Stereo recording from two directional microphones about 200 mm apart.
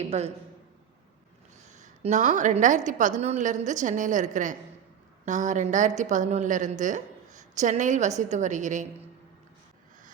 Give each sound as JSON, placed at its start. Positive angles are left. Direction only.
{"t": 0.1, "sound": "speech", "side_deg": -30}
{"t": 1.7, "sound": "a woman's voice", "side_deg": -35}